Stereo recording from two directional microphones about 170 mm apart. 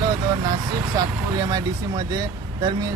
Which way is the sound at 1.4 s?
20° right (ahead or behind).